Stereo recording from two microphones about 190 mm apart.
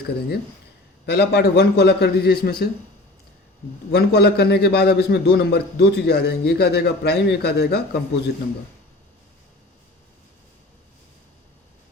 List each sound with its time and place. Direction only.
0.0 s a man's voice: 60° left (ahead or behind)
3.9 s a man's voice: 60° left (ahead or behind)